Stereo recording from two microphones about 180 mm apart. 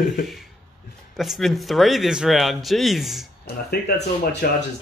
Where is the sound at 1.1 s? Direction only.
Centre (ahead or behind).